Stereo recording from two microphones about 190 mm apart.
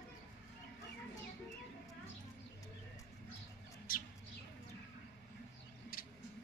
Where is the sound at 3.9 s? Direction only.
50° left (ahead or behind).